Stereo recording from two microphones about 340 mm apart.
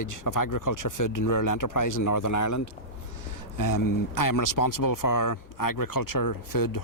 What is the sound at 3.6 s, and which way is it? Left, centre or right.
Speech, left.